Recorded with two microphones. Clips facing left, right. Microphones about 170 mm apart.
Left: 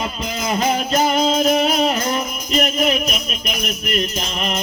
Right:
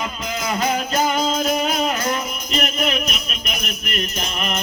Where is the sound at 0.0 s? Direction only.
30° left (ahead or behind).